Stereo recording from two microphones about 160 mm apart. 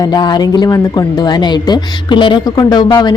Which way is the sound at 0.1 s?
25° left (ahead or behind).